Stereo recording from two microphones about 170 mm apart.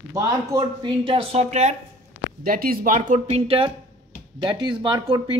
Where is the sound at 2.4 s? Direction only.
60° right (ahead or behind); by 3.7 s 35° right (ahead or behind).